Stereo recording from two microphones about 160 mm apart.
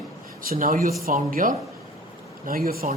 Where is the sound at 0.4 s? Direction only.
60° right (ahead or behind).